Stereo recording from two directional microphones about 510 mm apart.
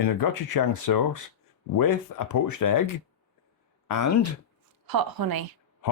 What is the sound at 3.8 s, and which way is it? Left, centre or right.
Speech, left.